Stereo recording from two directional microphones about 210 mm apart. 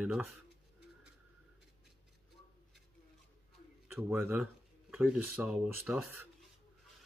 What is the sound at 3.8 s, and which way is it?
Speech, 10° right (ahead or behind).